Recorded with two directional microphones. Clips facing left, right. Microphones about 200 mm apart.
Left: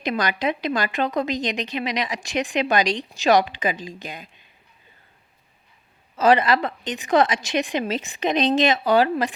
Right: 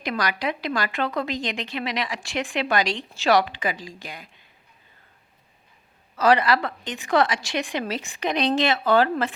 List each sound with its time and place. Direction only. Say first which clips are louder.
0.0 s a woman's voice: left 3 dB; 25° left (ahead or behind)
6.1 s a woman's voice: left 2 dB; 20° left (ahead or behind)